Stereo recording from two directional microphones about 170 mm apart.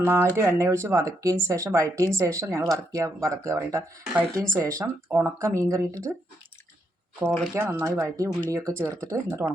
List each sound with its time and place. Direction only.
0.0 s speech: 15° right (ahead or behind)
7.3 s speech: centre (ahead or behind)
7.5 s speech: 15° right (ahead or behind)